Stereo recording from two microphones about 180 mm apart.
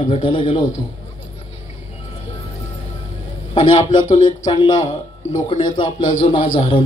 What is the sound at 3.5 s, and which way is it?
A man's voice, 25° left (ahead or behind).